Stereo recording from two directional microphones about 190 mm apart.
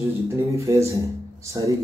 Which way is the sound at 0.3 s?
15° right (ahead or behind).